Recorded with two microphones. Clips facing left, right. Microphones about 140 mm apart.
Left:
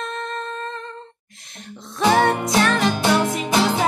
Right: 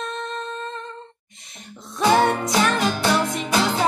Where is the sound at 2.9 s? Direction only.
20° left (ahead or behind).